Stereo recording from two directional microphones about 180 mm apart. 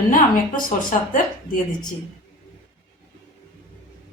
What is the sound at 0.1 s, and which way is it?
A woman's voice, 50° left (ahead or behind).